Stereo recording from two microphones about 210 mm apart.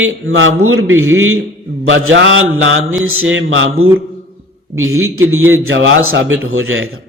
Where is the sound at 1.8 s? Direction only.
70° right (ahead or behind).